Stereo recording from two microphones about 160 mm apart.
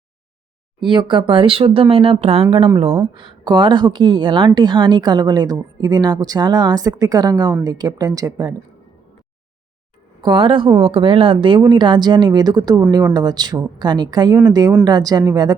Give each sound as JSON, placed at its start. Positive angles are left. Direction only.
{"t": 0.8, "sound": "speech", "side_deg": -30}
{"t": 2.9, "sound": "speech", "side_deg": -25}
{"t": 10.2, "sound": "speech", "side_deg": -30}